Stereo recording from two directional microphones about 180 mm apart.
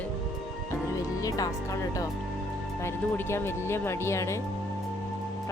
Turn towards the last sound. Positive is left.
turn(degrees=15)  # may be behind; listen again after turning